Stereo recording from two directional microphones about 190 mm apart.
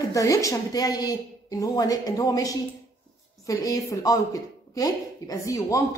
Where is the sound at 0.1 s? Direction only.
15° left (ahead or behind).